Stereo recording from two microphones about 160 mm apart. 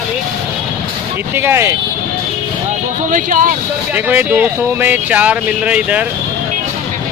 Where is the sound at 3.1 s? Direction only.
55° right (ahead or behind).